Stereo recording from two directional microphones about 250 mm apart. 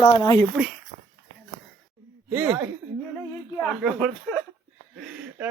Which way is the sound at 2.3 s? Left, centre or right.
Centre.